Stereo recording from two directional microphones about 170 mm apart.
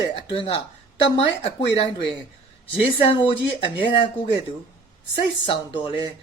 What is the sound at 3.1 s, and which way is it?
Speech, 30° left (ahead or behind).